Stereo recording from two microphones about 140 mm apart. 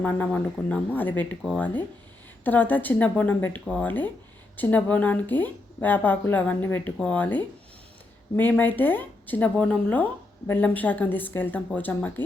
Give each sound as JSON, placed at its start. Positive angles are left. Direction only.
{"t": 0.0, "sound": "speech", "side_deg": 10}